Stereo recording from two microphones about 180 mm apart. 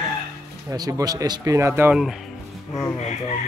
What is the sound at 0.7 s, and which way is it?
A man's voice, 20° right (ahead or behind).